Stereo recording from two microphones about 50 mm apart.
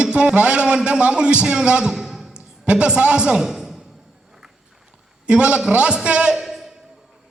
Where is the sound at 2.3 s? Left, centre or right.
Right.